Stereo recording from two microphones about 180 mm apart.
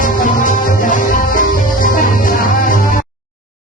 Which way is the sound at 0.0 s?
45° left (ahead or behind).